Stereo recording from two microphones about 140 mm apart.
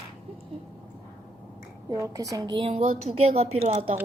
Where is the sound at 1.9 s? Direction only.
25° right (ahead or behind).